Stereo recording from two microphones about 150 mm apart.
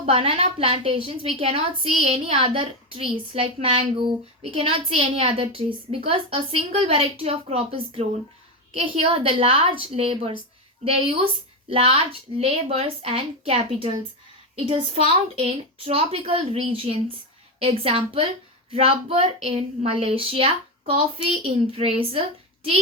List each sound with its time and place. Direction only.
0.0 s a woman's voice: 40° right (ahead or behind)